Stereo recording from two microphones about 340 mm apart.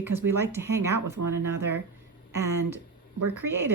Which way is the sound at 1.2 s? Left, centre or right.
Right.